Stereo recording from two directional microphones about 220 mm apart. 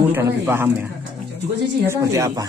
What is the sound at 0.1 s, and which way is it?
Speech, 10° right (ahead or behind).